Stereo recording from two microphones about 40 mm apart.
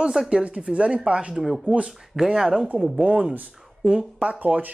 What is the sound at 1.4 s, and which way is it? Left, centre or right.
Speech, centre.